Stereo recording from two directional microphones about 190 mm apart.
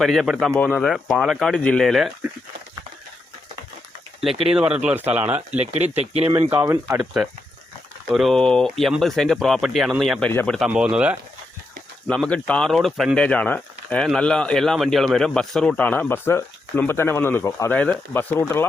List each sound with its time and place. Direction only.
0.0 s speech: centre (ahead or behind)
4.2 s speech: centre (ahead or behind)
5.5 s speech: 35° right (ahead or behind)
6.5 s speech: 10° right (ahead or behind)
7.0 s speech: 5° right (ahead or behind)
12.0 s speech: 5° left (ahead or behind)